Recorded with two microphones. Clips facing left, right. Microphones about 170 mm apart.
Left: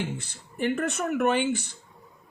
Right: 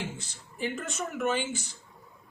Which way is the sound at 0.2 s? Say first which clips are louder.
Left 5 dB; 60° left (ahead or behind).